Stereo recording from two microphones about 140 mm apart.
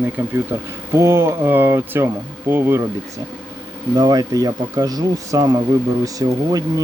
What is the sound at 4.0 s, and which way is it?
Speech, 25° right (ahead or behind).